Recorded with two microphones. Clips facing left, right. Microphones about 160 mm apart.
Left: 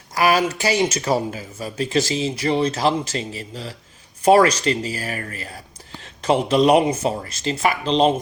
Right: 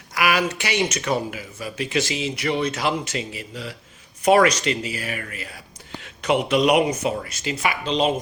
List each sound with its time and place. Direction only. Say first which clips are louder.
0.2 s speech: left 4 dB; 35° left (ahead or behind)